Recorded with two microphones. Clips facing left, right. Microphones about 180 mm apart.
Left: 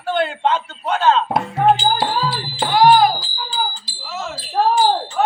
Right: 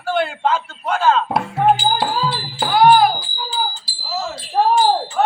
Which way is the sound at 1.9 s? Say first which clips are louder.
Even; centre (ahead or behind).